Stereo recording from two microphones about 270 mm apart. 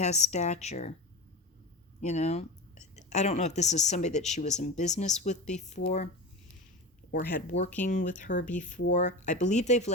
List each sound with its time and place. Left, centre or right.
0.0 s speech: left
2.0 s speech: left
7.1 s speech: left